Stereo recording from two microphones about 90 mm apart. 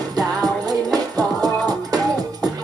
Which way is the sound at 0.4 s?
45° right (ahead or behind).